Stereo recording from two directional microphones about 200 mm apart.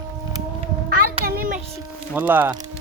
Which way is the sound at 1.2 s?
45° right (ahead or behind).